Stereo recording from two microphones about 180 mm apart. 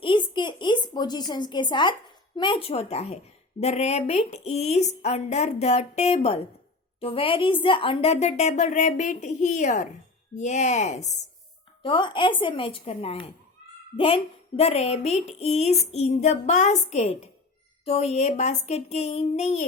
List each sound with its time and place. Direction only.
0.0 s a sound: 30° left (ahead or behind)
3.6 s a woman's voice: 35° left (ahead or behind)
11.8 s a woman's voice: 30° left (ahead or behind)